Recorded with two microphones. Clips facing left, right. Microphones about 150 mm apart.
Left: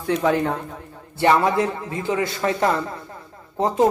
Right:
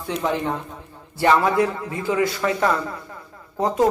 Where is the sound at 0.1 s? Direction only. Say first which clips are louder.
Left 4 dB; 60° left (ahead or behind).